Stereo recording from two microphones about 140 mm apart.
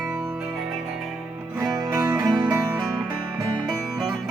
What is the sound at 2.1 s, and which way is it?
Music, 25° right (ahead or behind).